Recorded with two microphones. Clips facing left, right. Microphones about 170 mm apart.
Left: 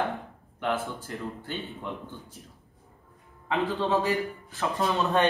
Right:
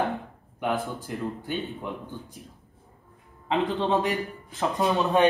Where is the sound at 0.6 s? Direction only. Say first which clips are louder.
Right 2 dB; 15° right (ahead or behind).